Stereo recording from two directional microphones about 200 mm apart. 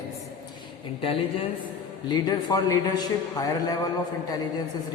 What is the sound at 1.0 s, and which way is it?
A man's voice, 25° left (ahead or behind).